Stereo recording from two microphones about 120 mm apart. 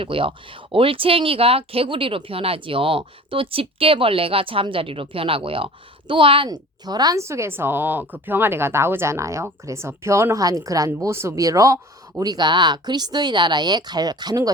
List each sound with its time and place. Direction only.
0.0 s speech: 45° right (ahead or behind)
6.5 s speech: 35° right (ahead or behind)